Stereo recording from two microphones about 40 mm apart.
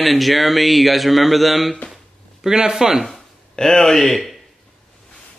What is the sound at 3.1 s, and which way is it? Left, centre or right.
Speech, centre.